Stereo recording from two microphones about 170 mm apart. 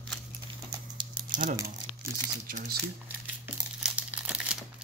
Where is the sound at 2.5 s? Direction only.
55° right (ahead or behind).